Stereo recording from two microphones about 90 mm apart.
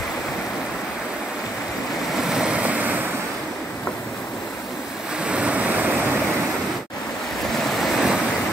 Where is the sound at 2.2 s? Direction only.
5° right (ahead or behind).